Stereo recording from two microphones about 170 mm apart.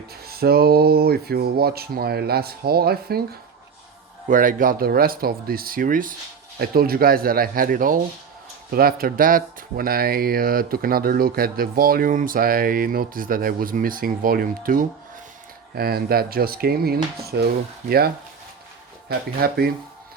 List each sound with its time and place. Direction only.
0.3 s speech: 65° right (ahead or behind)
4.3 s speech: 50° right (ahead or behind)